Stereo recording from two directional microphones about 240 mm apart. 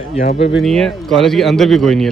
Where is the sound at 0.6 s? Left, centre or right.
Centre.